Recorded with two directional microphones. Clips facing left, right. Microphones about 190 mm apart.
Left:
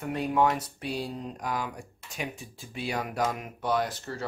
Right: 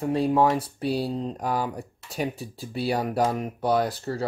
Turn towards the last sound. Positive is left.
turn(degrees=-35)  # may be behind; listen again after turning